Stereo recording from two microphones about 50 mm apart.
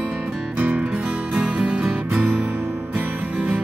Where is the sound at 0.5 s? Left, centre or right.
Right.